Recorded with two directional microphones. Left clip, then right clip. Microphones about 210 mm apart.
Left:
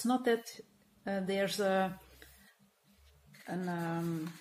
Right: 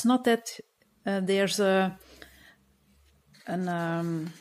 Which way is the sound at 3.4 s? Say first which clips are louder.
Right 8 dB; 55° right (ahead or behind).